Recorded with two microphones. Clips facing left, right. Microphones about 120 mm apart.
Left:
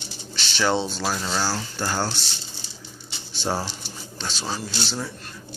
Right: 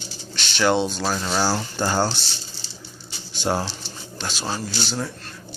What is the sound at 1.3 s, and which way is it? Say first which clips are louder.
Speech: right 4 dB; 20° right (ahead or behind).